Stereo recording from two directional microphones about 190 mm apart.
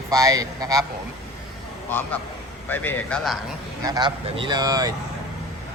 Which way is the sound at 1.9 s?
10° left (ahead or behind).